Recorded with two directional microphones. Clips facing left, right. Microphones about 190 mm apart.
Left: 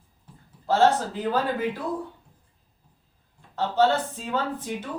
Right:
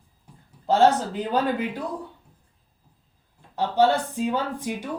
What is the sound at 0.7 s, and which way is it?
Speech, 15° right (ahead or behind).